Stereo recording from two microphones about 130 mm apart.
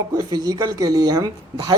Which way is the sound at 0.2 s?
30° right (ahead or behind).